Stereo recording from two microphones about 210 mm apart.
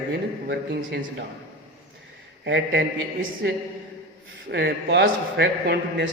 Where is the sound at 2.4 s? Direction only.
55° right (ahead or behind).